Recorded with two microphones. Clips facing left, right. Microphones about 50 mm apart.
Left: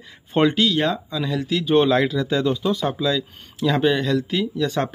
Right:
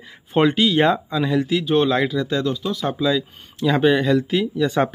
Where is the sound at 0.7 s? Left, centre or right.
Right; by 2.7 s centre.